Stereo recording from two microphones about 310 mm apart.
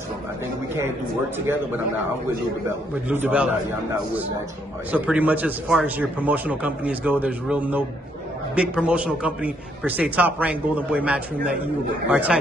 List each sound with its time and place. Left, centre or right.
3.1 s a man's voice: centre
4.9 s a man's voice: centre